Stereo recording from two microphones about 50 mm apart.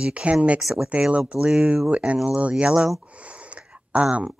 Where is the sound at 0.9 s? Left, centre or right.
Right.